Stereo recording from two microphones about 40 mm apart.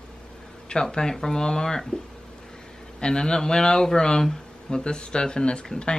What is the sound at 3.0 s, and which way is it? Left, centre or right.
Speech, centre.